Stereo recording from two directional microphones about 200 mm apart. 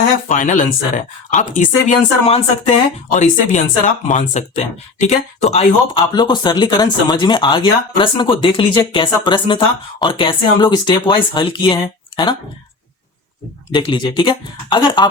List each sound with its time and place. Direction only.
0.3 s speech: 40° left (ahead or behind); by 12.4 s 25° left (ahead or behind)
13.7 s speech: 25° left (ahead or behind)